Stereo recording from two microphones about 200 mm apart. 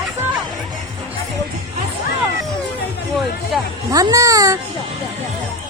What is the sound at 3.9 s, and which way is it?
Music, 15° right (ahead or behind).